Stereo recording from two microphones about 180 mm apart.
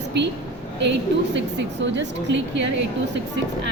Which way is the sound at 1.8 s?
90° right.